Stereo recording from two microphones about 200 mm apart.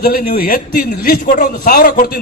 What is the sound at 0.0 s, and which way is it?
A man's voice, 50° left (ahead or behind).